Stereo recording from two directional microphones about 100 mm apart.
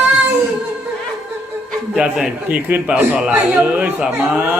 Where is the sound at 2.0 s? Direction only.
5° right (ahead or behind).